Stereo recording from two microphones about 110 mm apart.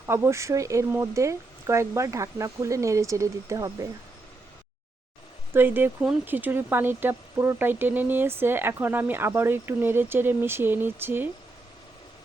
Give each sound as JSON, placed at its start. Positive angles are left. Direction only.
{"t": 0.0, "sound": "speech", "side_deg": -20}
{"t": 5.5, "sound": "speech", "side_deg": -20}